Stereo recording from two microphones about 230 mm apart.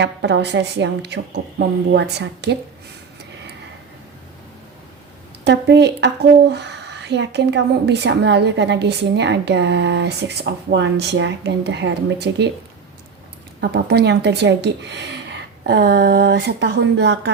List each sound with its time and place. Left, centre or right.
0.0 s a woman's voice: right
5.5 s a woman's voice: right
13.6 s a woman's voice: right